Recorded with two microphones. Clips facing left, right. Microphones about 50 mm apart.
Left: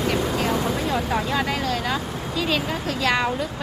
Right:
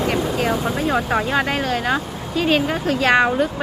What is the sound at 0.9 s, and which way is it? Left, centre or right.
Speech, right.